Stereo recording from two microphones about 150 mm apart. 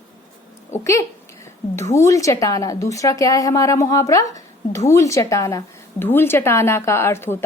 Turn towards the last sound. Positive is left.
turn(degrees=15)  # may be behind; listen again after turning